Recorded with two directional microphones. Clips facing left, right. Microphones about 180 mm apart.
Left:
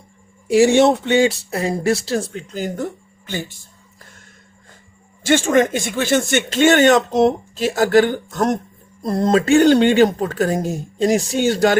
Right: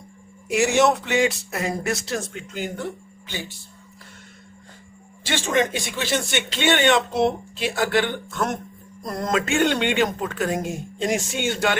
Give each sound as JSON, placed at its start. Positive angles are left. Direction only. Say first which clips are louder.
{"t": 0.4, "sound": "speech", "louder": "left 6 dB", "side_deg": 30}
{"t": 5.2, "sound": "speech", "louder": "left 7 dB", "side_deg": 50}
{"t": 9.0, "sound": "speech", "louder": "left 8 dB", "side_deg": 30}